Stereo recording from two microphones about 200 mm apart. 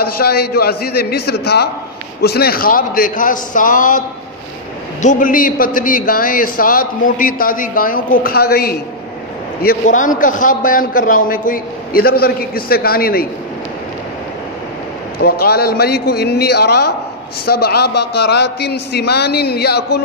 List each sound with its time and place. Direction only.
0.0 s a man's voice: 50° left (ahead or behind)
5.0 s a man's voice: 45° left (ahead or behind)
15.2 s a man's voice: 50° left (ahead or behind)